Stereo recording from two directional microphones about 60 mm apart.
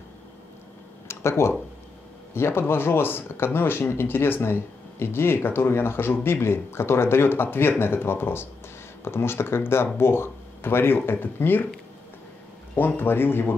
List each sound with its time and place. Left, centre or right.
1.0 s a sound: left
2.3 s speech: left
12.7 s speech: left